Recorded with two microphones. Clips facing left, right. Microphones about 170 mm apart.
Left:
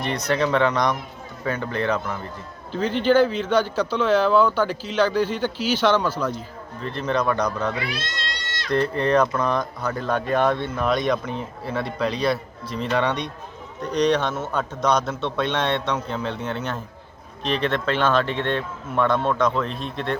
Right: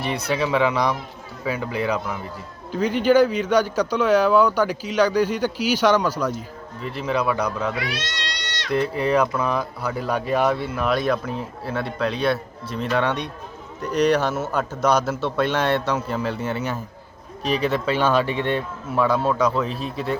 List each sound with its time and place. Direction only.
0.0 s a man's voice: 5° right (ahead or behind)
7.9 s cat: 80° right
8.7 s a man's voice: 5° right (ahead or behind)